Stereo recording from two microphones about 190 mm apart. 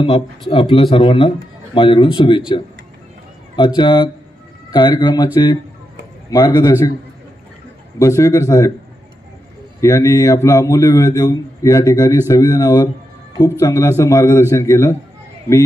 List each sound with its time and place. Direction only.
0.5 s speech: 30° left (ahead or behind)
8.0 s a man's voice: 15° left (ahead or behind)
9.8 s a man's voice: 15° left (ahead or behind)